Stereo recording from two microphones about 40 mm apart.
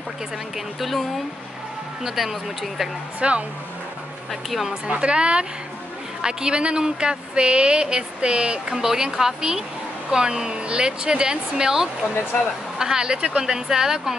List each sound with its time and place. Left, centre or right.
0.7 s speech: centre
3.2 s speech: right
4.3 s speech: centre
4.8 s speech: right
8.7 s a woman's voice: centre